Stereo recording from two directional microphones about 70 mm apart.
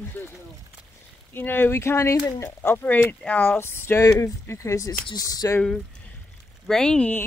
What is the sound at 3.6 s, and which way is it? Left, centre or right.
Speech, left.